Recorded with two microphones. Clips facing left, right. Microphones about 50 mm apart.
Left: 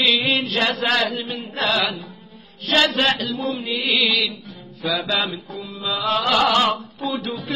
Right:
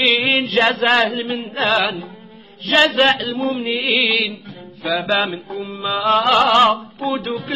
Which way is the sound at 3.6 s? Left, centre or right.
Right.